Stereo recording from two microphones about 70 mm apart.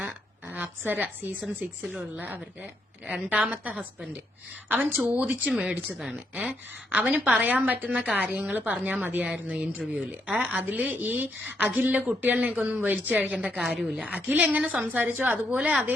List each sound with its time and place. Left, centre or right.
0.5 s a woman's voice: right
2.1 s a woman's voice: right
5.5 s speech: centre
6.1 s a woman's voice: right